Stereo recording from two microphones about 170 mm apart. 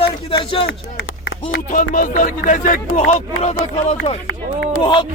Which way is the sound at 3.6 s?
40° left (ahead or behind).